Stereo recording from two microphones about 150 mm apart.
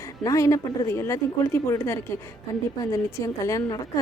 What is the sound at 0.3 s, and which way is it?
Speech, 20° left (ahead or behind).